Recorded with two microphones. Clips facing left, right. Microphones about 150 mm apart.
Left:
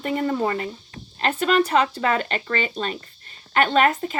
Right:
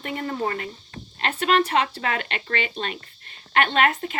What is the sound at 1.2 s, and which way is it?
A woman's voice, 40° left (ahead or behind).